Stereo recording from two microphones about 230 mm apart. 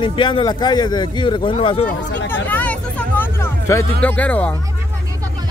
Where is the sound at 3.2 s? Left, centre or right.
Centre.